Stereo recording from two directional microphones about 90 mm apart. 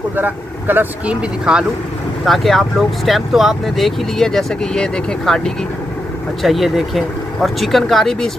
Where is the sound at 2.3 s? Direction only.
Centre (ahead or behind).